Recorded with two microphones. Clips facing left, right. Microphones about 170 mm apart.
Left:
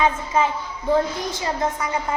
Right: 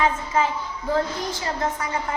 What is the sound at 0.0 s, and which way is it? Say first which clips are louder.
A woman's voice: left 2 dB; 20° left (ahead or behind).